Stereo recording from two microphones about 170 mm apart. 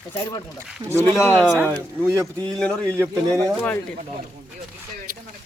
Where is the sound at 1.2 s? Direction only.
10° left (ahead or behind).